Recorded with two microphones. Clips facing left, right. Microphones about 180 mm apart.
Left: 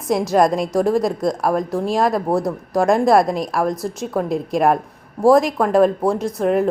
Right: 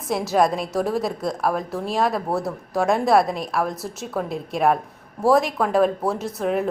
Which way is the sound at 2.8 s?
Centre (ahead or behind).